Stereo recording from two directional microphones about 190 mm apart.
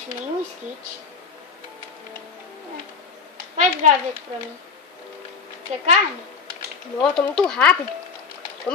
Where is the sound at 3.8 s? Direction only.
40° right (ahead or behind).